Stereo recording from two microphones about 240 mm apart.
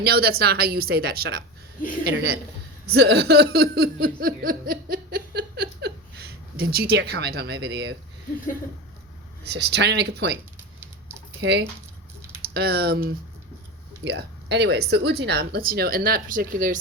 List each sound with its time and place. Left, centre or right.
0.0 s speech: right
9.5 s speech: right
10.8 s patter: centre
11.3 s speech: right